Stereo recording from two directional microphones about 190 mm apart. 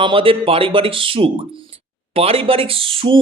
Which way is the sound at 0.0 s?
30° right (ahead or behind).